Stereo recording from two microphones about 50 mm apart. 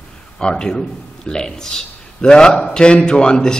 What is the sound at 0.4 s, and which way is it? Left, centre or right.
A man's voice, centre.